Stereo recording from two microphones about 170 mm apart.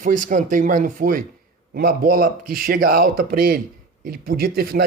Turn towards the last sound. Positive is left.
turn(degrees=-60)  # may be behind; listen again after turning